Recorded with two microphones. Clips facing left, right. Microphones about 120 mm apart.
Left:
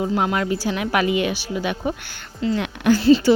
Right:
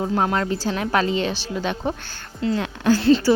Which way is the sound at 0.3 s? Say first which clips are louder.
Left 1 dB; 10° left (ahead or behind).